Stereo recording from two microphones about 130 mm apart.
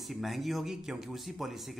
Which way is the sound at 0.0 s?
Centre (ahead or behind).